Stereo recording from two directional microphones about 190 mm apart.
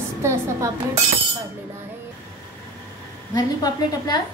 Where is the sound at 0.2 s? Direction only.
15° right (ahead or behind).